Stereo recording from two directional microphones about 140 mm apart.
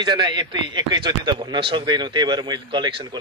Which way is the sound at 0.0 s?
30° right (ahead or behind).